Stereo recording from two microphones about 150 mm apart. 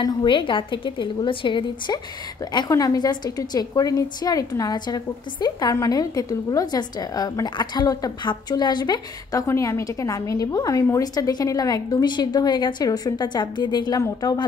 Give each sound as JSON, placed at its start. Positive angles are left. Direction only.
{"t": 0.0, "sound": "a woman's voice", "side_deg": 30}